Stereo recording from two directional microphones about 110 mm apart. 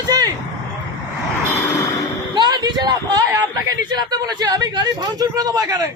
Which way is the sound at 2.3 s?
40° right (ahead or behind).